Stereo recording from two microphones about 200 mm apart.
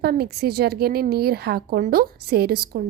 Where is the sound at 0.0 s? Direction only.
50° right (ahead or behind).